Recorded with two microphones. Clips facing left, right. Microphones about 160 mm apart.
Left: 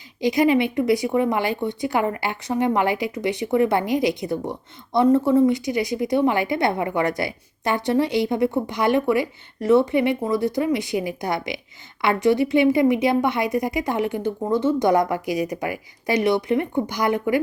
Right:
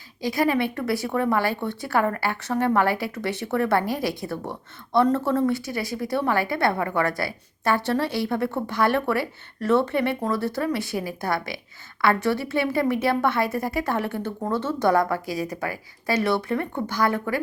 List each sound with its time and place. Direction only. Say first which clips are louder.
0.2 s a woman's voice: left 4 dB; 20° left (ahead or behind)